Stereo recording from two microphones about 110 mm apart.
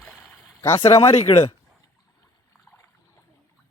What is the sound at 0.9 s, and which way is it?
Speech, 70° left (ahead or behind).